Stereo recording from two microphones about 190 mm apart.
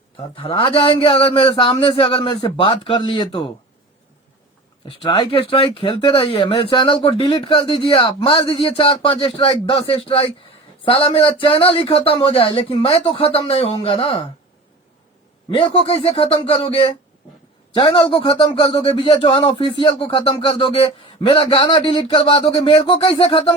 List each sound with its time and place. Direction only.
0.3 s speech: 30° left (ahead or behind)
4.9 s speech: 25° left (ahead or behind)
15.4 s speech: 25° left (ahead or behind)